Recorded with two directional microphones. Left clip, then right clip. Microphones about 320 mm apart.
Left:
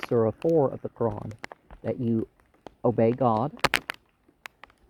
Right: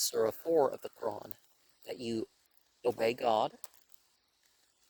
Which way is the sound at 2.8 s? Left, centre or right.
Right.